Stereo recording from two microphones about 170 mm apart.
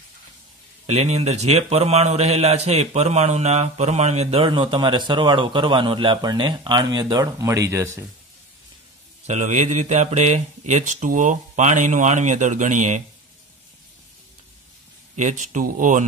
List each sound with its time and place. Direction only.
0.8 s a man's voice: 40° right (ahead or behind); by 8.0 s 15° right (ahead or behind)
9.2 s speech: 45° right (ahead or behind)
15.1 s speech: 45° right (ahead or behind)